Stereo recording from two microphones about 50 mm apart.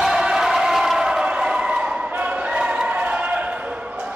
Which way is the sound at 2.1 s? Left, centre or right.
Right.